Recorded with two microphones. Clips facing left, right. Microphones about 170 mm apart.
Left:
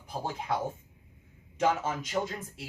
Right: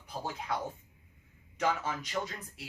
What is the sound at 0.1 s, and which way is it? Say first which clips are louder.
Speech: left 4 dB; 25° left (ahead or behind).